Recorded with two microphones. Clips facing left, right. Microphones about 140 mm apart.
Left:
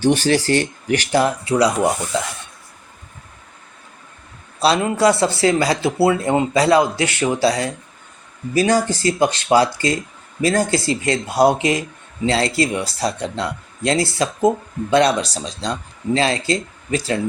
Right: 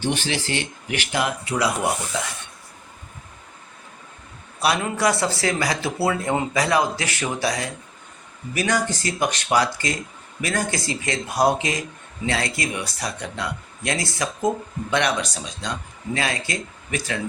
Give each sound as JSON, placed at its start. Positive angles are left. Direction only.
{"t": 0.0, "sound": "speech", "side_deg": 40}
{"t": 4.6, "sound": "speech", "side_deg": 30}